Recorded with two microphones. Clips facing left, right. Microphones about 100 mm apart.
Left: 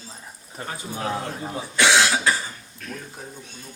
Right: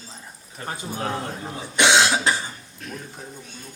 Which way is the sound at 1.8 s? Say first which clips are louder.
Right 1 dB; 20° right (ahead or behind).